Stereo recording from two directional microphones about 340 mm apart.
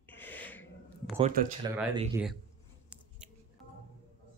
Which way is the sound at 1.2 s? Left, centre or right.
Right.